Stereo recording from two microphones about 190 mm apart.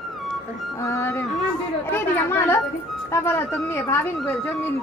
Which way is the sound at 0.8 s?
15° left (ahead or behind).